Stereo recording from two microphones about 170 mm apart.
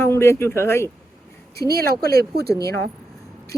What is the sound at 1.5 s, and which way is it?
Speech, 65° right (ahead or behind).